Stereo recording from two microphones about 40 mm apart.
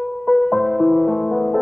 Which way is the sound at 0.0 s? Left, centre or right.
Centre.